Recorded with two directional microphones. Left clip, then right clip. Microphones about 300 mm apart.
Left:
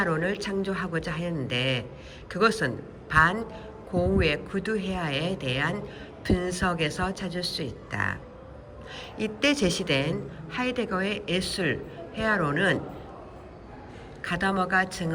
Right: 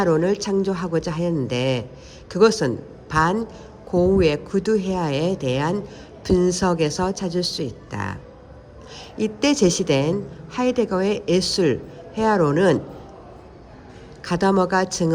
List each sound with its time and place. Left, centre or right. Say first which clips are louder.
0.0 s a woman's voice: right 8 dB; centre
14.2 s a woman's voice: right 7 dB; centre